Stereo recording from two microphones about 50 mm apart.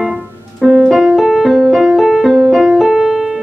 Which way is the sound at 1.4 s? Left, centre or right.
Centre.